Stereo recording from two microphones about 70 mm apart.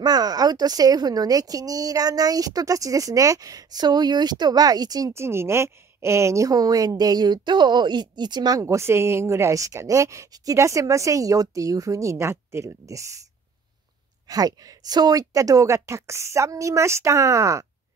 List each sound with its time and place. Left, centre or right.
0.0 s speech: right
5.1 s speech: right
8.5 s speech: right
14.2 s speech: right